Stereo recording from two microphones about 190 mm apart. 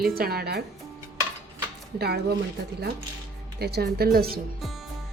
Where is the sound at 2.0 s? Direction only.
60° right (ahead or behind).